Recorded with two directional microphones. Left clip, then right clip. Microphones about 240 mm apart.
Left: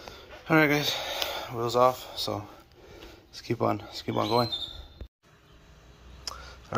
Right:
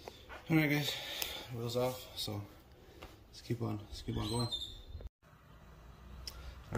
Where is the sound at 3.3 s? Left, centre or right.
Centre.